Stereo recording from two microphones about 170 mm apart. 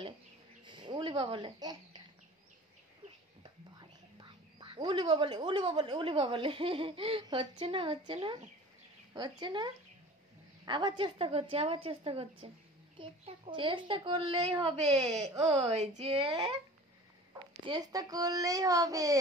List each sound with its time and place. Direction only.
0.7 s a sound: 25° right (ahead or behind)
3.7 s a woman's voice: 25° right (ahead or behind)
17.6 s speech: 25° right (ahead or behind)